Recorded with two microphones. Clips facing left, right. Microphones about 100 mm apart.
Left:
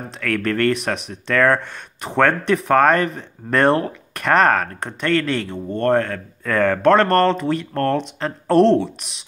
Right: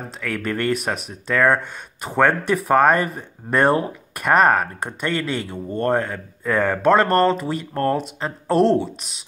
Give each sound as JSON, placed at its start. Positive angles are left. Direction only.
{"t": 0.2, "sound": "speech", "side_deg": -10}